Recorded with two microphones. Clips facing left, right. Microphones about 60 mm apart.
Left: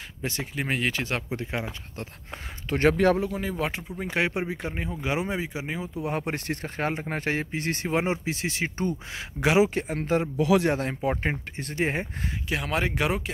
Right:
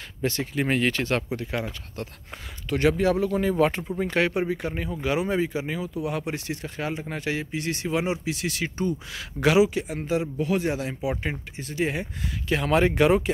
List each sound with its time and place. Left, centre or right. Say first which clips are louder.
0.2 s speech: right 5 dB; centre
1.3 s speech: right 2 dB; left
2.7 s speech: left 1 dB; left
3.3 s speech: right 7 dB; centre
4.0 s speech: right 3 dB; centre
5.3 s speech: right 5 dB; centre
5.8 s speech: right 1 dB; left
10.3 s speech: left 3 dB; left
10.7 s speech: left 2 dB; left
12.4 s speech: right 6 dB; centre